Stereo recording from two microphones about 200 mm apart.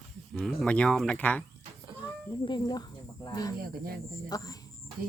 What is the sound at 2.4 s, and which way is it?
Speech, 20° left (ahead or behind).